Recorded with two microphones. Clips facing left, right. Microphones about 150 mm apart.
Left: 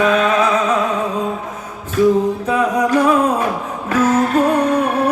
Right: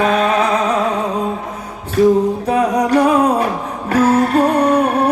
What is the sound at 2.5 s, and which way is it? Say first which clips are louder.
Music: right 1 dB; 35° right (ahead or behind).